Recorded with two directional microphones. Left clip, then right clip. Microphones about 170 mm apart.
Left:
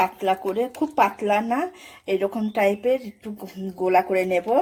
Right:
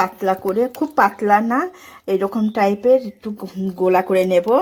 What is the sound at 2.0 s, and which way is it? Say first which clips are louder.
Speech: right 4 dB; 35° right (ahead or behind).